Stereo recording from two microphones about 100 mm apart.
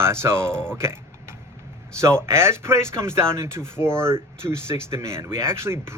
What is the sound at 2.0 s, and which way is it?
Speech, 30° right (ahead or behind).